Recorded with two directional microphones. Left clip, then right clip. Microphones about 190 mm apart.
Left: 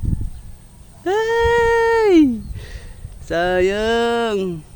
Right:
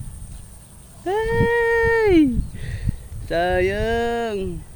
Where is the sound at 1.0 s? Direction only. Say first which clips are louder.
Left 4 dB; 35° left (ahead or behind).